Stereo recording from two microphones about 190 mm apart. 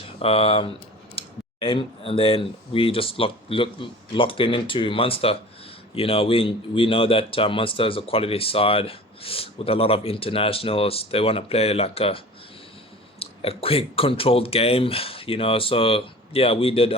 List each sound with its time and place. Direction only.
0.2 s a man's voice: 30° left (ahead or behind)